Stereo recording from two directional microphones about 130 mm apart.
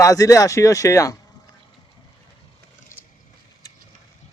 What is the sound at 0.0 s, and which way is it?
Speech, 25° left (ahead or behind).